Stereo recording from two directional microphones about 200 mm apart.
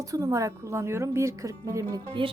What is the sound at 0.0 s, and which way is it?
Speech, 15° right (ahead or behind).